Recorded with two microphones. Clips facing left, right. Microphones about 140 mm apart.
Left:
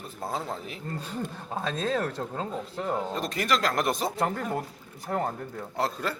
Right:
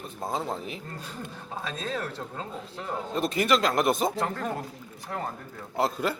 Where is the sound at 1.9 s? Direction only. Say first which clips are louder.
Left 4 dB; 35° left (ahead or behind).